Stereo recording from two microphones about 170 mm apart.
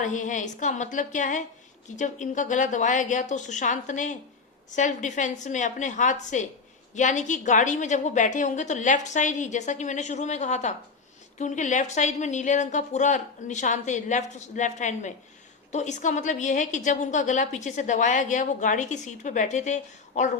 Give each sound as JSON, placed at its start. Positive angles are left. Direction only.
{"t": 0.0, "sound": "a woman's voice", "side_deg": 45}